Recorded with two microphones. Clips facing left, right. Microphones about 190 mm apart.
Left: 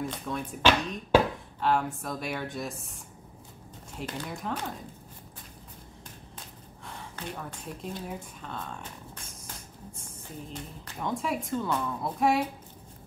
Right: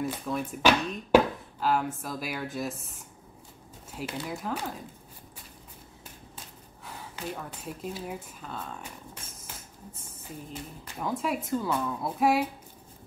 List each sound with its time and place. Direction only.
0.0 s a woman's voice: 5° right (ahead or behind)
3.9 s a woman's voice: 5° right (ahead or behind)
6.8 s speech: 5° right (ahead or behind)
10.5 s a woman's voice: 5° right (ahead or behind)